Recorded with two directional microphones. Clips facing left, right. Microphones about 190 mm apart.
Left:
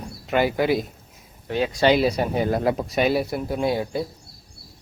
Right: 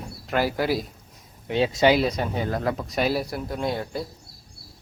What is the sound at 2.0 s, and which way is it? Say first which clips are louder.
Speech: left 4 dB; 10° left (ahead or behind).